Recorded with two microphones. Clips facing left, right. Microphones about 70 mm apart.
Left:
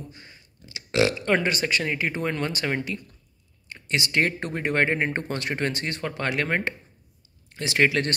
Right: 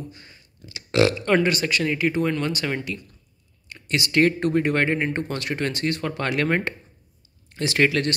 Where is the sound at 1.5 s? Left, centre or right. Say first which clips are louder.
Right 3 dB; left.